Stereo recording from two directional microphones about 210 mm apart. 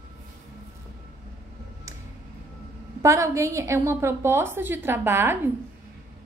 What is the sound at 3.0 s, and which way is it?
A woman's voice, 15° right (ahead or behind).